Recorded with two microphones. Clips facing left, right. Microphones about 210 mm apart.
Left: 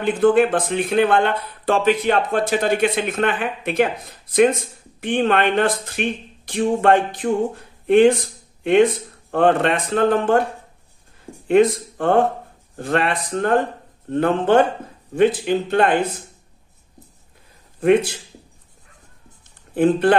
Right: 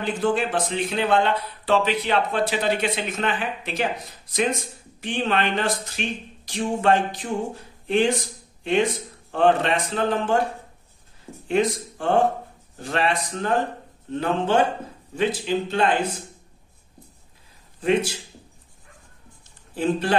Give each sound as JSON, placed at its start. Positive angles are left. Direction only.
{"t": 0.0, "sound": "speech", "side_deg": 55}
{"t": 9.3, "sound": "speech", "side_deg": 55}
{"t": 11.4, "sound": "speech", "side_deg": 55}
{"t": 17.7, "sound": "speech", "side_deg": 55}
{"t": 19.7, "sound": "speech", "side_deg": 55}